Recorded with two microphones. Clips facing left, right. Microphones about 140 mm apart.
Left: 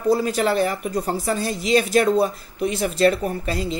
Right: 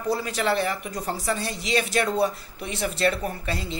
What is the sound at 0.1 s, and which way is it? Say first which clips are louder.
Speech: left 5 dB; 40° left (ahead or behind).